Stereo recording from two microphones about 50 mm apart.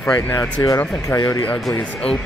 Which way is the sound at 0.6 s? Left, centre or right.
Left.